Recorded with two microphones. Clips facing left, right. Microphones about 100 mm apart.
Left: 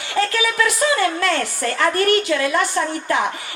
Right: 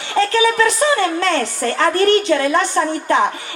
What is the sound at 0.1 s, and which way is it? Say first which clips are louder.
A woman's voice: right 5 dB; 30° right (ahead or behind).